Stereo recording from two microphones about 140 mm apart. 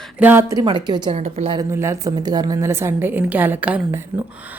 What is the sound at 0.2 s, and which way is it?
Speech, 15° right (ahead or behind).